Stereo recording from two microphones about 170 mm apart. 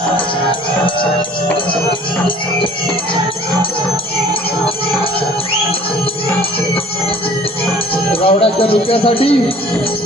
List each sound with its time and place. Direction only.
1.9 s speech: 30° left (ahead or behind)
8.1 s speech: 35° left (ahead or behind)